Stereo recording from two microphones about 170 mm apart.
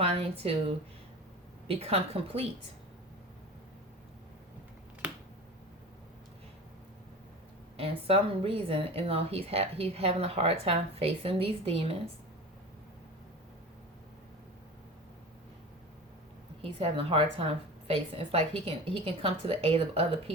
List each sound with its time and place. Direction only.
0.0 s speech: 35° right (ahead or behind)
1.6 s speech: 35° right (ahead or behind)
7.8 s speech: 35° right (ahead or behind)
16.6 s speech: 35° right (ahead or behind)